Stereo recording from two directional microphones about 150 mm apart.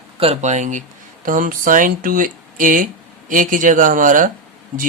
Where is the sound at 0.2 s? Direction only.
45° right (ahead or behind).